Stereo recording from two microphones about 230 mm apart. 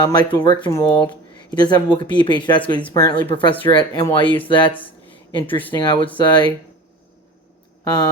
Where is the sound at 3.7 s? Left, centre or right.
Left.